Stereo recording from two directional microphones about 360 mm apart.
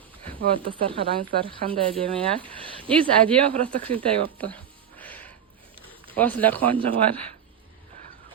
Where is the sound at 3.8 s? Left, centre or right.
Right.